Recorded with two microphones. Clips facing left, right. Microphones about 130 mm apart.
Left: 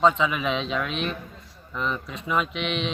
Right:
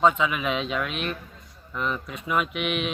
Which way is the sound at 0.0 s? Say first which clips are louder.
Left 1 dB; 5° right (ahead or behind).